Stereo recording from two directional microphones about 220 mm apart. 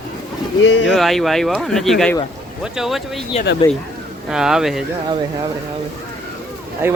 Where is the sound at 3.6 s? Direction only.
15° left (ahead or behind).